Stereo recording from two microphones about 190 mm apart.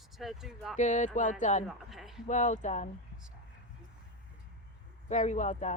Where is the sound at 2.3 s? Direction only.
40° left (ahead or behind).